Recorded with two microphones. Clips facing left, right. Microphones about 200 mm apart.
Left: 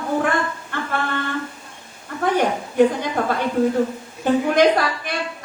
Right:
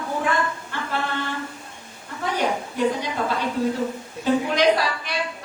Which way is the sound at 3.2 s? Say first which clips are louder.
Left 5 dB; 55° left (ahead or behind).